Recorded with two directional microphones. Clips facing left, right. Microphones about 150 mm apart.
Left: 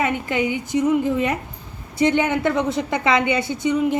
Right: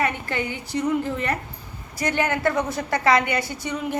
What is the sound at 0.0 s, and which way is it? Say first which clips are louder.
A woman's voice: left 4 dB; 20° left (ahead or behind).